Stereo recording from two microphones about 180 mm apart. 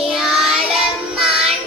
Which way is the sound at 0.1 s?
Centre (ahead or behind).